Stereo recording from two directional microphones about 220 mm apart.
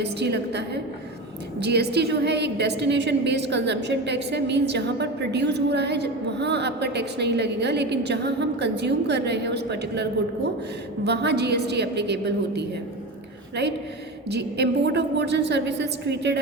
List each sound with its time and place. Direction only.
0.0 s a woman's voice: 50° right (ahead or behind)
14.3 s a woman's voice: 50° right (ahead or behind)